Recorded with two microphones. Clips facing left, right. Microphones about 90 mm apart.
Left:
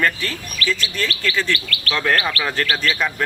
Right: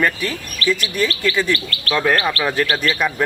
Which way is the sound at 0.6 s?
30° right (ahead or behind).